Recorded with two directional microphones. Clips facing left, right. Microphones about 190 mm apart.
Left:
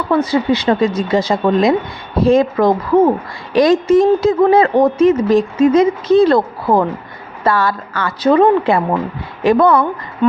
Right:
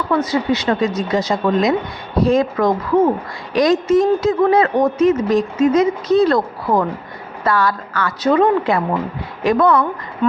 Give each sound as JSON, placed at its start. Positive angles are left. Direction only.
{"t": 0.2, "sound": "speech", "side_deg": 30}